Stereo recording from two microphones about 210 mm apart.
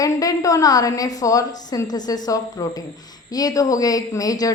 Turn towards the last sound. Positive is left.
turn(degrees=15)  # may be behind; listen again after turning